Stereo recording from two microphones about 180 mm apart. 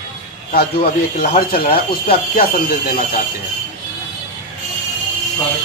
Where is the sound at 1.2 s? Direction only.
50° left (ahead or behind).